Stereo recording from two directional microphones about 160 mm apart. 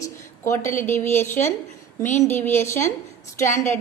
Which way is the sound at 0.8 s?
15° left (ahead or behind).